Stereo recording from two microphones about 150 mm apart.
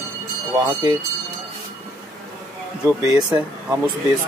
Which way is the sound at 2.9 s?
25° right (ahead or behind).